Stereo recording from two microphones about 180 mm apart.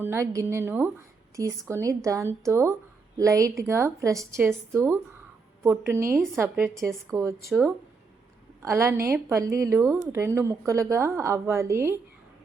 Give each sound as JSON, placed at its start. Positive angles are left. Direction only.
{"t": 0.0, "sound": "a woman's voice", "side_deg": -15}
{"t": 8.6, "sound": "a woman's voice", "side_deg": -15}